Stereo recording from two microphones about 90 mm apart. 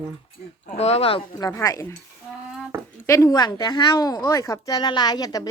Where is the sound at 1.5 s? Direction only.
35° left (ahead or behind).